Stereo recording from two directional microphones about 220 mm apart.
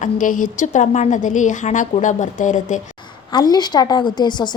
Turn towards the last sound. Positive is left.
turn(degrees=20)  # may be behind; listen again after turning